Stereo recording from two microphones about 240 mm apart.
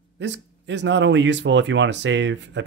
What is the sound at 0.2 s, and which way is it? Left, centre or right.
Speech, right.